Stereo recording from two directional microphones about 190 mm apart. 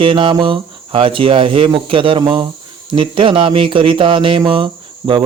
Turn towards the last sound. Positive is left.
turn(degrees=-25)  # may be behind; listen again after turning